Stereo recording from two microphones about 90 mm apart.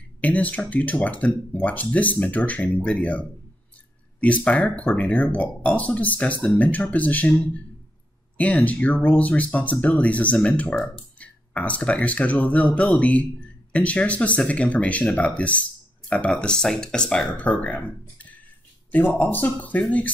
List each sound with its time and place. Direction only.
0.2 s speech: 15° left (ahead or behind)